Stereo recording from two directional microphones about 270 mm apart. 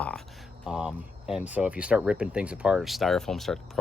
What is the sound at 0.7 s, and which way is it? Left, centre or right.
Speech, centre.